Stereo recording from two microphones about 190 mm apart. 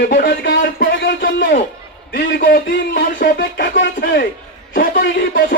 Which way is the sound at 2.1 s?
50° left (ahead or behind).